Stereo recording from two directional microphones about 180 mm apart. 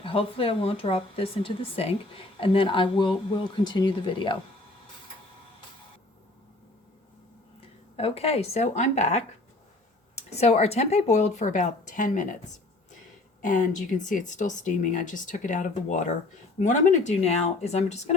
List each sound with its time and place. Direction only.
0.0 s speech: 30° left (ahead or behind)
7.6 s speech: 35° left (ahead or behind)
13.4 s speech: 45° left (ahead or behind)